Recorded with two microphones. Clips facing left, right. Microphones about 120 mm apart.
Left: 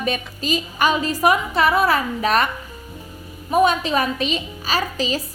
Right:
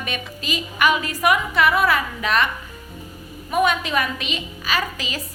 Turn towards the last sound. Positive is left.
turn(degrees=35)  # may be behind; listen again after turning